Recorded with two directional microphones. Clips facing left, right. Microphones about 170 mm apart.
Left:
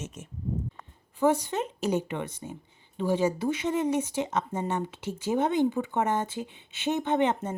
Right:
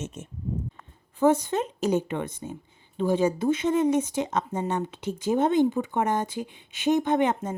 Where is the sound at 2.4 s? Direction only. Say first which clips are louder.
Right 3 dB; 25° right (ahead or behind).